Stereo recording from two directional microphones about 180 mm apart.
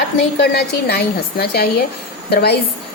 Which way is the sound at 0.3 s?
65° left (ahead or behind).